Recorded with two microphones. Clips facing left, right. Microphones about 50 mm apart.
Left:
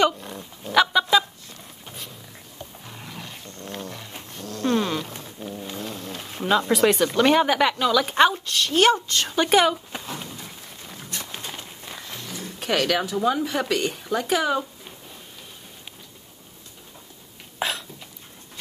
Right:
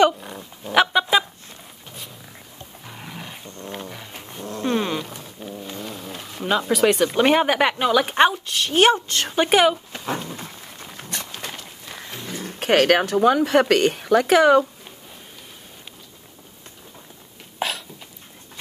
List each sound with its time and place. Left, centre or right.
0.2 s dog: centre
0.7 s fowl: right
1.9 s roaring cats: centre
2.8 s roaring cats: centre
3.5 s a sound: centre
5.2 s a sound: centre
6.4 s speech: centre
7.1 s speech: centre
9.0 s a woman's voice: right
9.3 s speech: right
10.2 s a sound: right
12.3 s speech: right
17.6 s cough: centre